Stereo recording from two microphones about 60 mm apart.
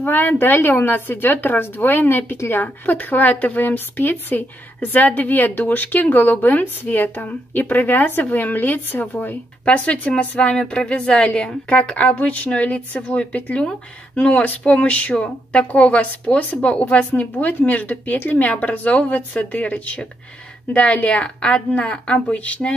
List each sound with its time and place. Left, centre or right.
0.0 s speech: left
9.7 s a woman's voice: left